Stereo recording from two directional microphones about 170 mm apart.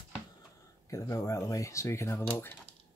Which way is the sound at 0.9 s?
20° left (ahead or behind).